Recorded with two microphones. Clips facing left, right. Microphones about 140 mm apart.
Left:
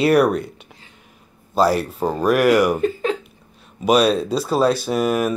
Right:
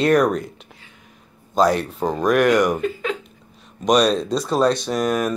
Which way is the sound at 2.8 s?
35° left (ahead or behind).